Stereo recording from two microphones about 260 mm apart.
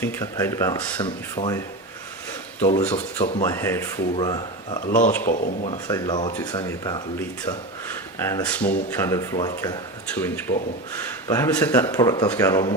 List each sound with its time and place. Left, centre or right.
0.0 s speech: centre
2.9 s speech: left
3.4 s speech: centre
4.8 s a man's voice: left
5.9 s speech: centre